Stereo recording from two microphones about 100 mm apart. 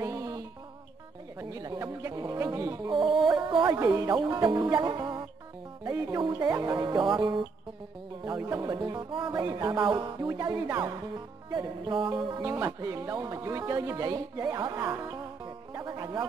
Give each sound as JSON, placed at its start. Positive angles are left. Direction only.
{"t": 0.0, "sound": "music", "side_deg": -35}
{"t": 1.4, "sound": "a sound", "side_deg": -35}
{"t": 2.9, "sound": "music", "side_deg": -55}
{"t": 3.8, "sound": "speech", "side_deg": -40}
{"t": 5.9, "sound": "music", "side_deg": -30}
{"t": 6.1, "sound": "music", "side_deg": -45}
{"t": 8.3, "sound": "speech", "side_deg": -35}
{"t": 9.3, "sound": "music", "side_deg": -45}
{"t": 10.2, "sound": "speech", "side_deg": -35}
{"t": 11.5, "sound": "music", "side_deg": -50}
{"t": 12.4, "sound": "speech", "side_deg": -25}
{"t": 15.4, "sound": "music", "side_deg": -40}